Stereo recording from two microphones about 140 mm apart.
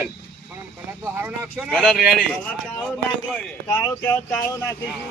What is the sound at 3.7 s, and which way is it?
Speech, 15° left (ahead or behind).